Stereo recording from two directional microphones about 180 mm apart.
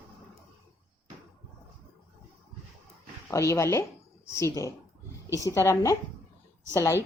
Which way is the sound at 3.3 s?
15° left (ahead or behind).